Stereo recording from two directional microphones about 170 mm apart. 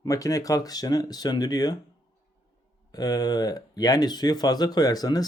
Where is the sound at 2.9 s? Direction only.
20° left (ahead or behind).